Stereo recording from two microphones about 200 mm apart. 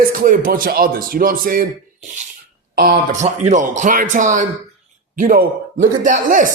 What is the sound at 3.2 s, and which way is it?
Speech, 35° right (ahead or behind).